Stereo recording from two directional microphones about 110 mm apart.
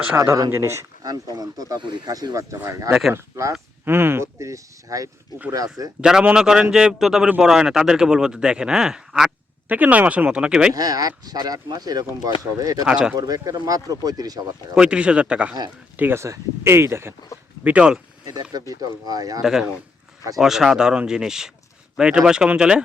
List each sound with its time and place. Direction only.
0.1 s speech: 25° right (ahead or behind)
6.0 s a man's voice: 5° right (ahead or behind)
9.6 s a man's voice: 15° right (ahead or behind)
10.8 s speech: 35° right (ahead or behind)
12.8 s a man's voice: 10° right (ahead or behind)
13.1 s speech: 35° right (ahead or behind)
14.8 s a man's voice: 10° right (ahead or behind)
16.0 s speech: 20° right (ahead or behind)
17.6 s a man's voice: 10° right (ahead or behind)
18.7 s speech: 35° right (ahead or behind)
19.4 s a man's voice: 5° right (ahead or behind)